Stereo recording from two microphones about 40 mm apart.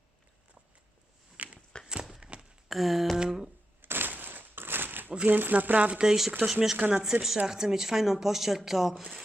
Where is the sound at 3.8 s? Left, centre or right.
Right.